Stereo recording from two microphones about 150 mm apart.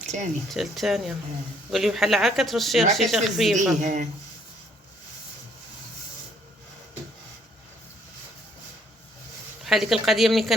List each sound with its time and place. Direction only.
0.5 s speech: centre (ahead or behind)
3.8 s speech: 55° right (ahead or behind)
9.6 s speech: centre (ahead or behind)